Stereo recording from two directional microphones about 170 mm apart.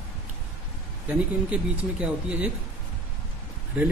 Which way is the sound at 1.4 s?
5° right (ahead or behind).